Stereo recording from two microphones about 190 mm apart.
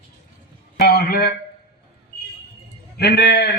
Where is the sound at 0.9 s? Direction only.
55° left (ahead or behind).